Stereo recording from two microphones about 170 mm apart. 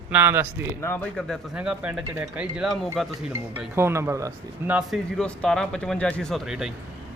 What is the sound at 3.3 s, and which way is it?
Speech, 10° right (ahead or behind).